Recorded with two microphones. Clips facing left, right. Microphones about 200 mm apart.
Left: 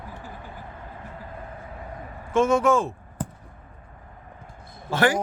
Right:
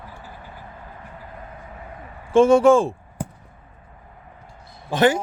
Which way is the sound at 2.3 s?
30° right (ahead or behind).